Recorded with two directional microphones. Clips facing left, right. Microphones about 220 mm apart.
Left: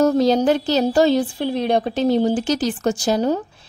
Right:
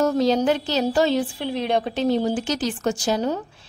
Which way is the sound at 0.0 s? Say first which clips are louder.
Left 4 dB; 40° left (ahead or behind).